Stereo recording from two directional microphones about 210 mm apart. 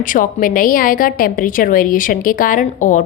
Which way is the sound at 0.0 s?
40° left (ahead or behind).